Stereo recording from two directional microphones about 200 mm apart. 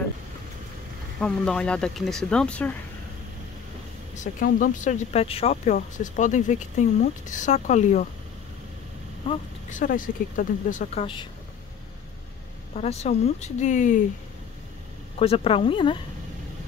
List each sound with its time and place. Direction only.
1.2 s speech: 5° left (ahead or behind)
4.1 s speech: 40° left (ahead or behind)
9.3 s speech: 25° left (ahead or behind)
9.7 s speech: 40° left (ahead or behind)
12.7 s speech: 35° left (ahead or behind)
15.1 s speech: 30° left (ahead or behind)